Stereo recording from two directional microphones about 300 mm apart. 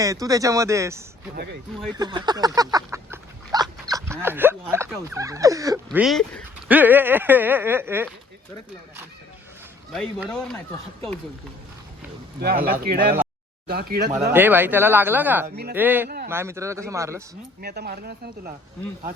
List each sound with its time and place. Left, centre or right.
0.0 s speech: centre
2.0 s a sound: centre
9.9 s speech: centre
12.4 s speech: right
14.3 s speech: centre
15.4 s speech: right
15.7 s speech: centre
16.0 s a man's voice: right
16.3 s speech: centre
17.6 s speech: right